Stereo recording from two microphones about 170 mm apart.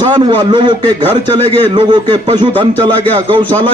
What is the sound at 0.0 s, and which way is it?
A man's voice, 25° right (ahead or behind).